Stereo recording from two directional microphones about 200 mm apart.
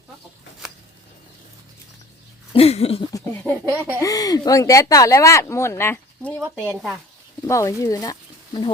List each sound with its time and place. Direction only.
2.5 s speech: 30° left (ahead or behind)
3.1 s speech: 15° left (ahead or behind)
3.7 s speech: 10° right (ahead or behind)
4.0 s speech: 20° left (ahead or behind)
7.4 s speech: 15° left (ahead or behind)